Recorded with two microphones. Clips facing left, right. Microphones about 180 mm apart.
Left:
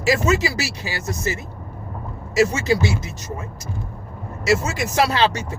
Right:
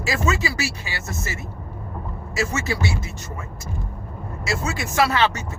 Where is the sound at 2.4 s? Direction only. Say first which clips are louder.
Left 5 dB; 40° left (ahead or behind).